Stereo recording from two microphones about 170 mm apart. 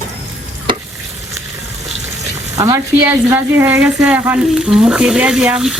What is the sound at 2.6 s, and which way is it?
Speech, 15° right (ahead or behind).